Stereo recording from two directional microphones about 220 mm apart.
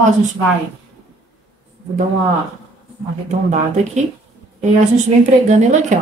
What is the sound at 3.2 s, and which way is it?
A woman's voice, 30° right (ahead or behind).